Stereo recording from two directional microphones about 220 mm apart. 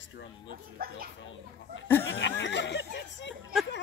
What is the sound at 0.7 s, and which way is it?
Speech, 40° right (ahead or behind).